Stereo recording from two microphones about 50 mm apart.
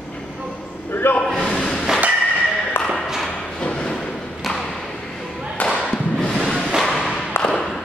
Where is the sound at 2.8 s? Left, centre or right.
Left.